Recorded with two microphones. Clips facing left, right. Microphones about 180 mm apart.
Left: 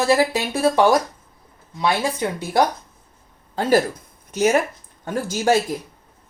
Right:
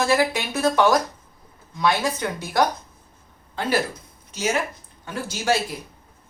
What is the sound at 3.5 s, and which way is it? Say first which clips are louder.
Speech: left 6 dB; 40° left (ahead or behind).